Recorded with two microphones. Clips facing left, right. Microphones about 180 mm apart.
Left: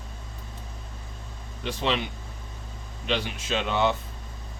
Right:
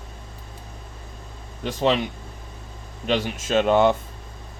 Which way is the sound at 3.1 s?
45° right (ahead or behind).